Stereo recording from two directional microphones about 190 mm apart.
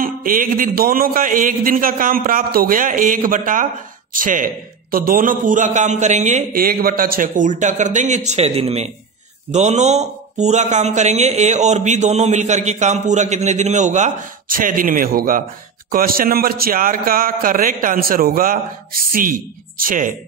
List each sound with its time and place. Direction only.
0.0 s a man's voice: 45° right (ahead or behind)